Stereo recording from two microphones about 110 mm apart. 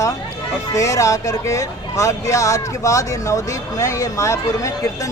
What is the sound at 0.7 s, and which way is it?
Speech, 30° left (ahead or behind).